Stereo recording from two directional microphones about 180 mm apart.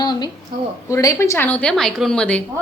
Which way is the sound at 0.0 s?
25° left (ahead or behind).